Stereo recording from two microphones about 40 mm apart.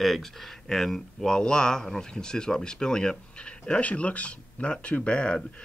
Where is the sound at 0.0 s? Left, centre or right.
Centre.